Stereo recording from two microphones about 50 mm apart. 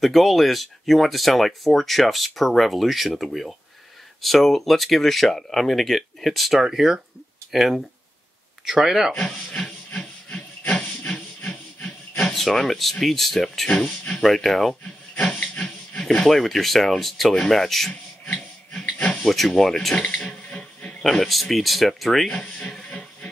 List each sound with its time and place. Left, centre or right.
0.0 s speech: centre
9.9 s hiss: left
12.2 s speech: centre
13.7 s speech: centre
14.2 s speech: centre
15.1 s a sound: left
16.3 s speech: centre
18.9 s a sound: left
19.2 s speech: centre
20.0 s a sound: left
21.0 s speech: centre
22.3 s speech: left
22.8 s music: left